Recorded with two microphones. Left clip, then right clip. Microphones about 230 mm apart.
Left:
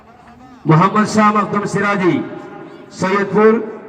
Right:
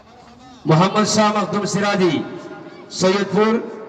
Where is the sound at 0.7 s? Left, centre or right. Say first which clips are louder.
Left 3 dB; right.